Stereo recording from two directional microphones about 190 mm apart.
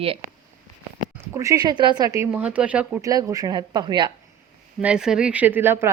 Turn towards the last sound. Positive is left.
turn(degrees=-10)  # may be behind; listen again after turning